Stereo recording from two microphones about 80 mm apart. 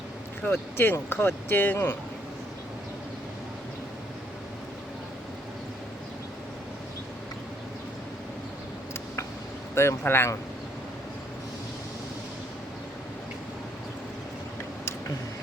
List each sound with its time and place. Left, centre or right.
0.4 s speech: left
9.7 s speech: left